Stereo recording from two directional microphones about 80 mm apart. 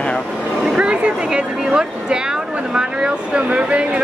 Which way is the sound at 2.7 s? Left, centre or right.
Centre.